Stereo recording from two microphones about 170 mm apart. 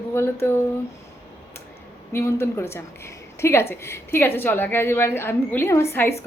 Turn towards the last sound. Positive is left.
turn(degrees=15)  # may be behind; listen again after turning